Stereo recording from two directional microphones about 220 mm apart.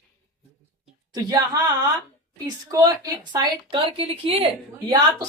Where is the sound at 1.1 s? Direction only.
15° right (ahead or behind).